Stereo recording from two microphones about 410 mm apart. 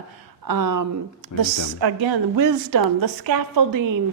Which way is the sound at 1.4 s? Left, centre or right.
Right.